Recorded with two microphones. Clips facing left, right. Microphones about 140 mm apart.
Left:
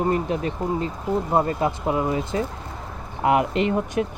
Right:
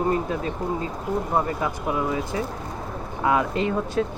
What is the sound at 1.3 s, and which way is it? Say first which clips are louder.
Speech: left 4 dB; 25° left (ahead or behind).